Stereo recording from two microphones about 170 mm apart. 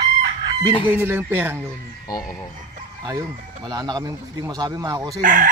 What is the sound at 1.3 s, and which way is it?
Speech, 10° right (ahead or behind).